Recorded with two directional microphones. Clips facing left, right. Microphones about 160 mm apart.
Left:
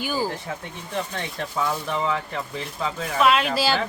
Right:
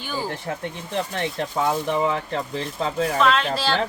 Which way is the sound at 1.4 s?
20° right (ahead or behind).